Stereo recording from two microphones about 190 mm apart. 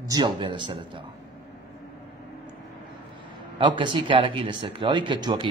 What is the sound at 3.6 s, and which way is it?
Speech, 25° right (ahead or behind).